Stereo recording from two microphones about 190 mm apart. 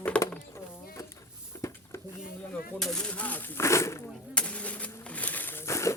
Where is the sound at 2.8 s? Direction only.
5° left (ahead or behind).